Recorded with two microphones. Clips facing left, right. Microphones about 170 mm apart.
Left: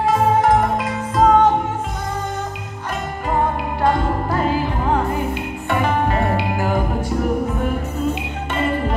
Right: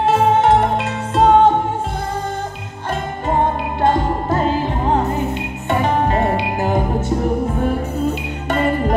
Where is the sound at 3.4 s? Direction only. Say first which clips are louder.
Right 1 dB; 25° right (ahead or behind).